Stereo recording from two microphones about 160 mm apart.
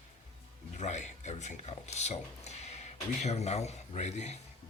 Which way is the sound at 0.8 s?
50° left (ahead or behind).